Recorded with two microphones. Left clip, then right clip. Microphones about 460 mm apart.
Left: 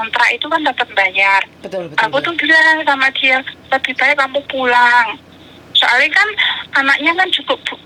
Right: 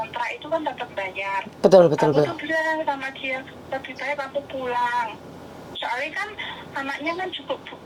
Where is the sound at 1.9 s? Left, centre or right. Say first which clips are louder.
Left 5 dB; left.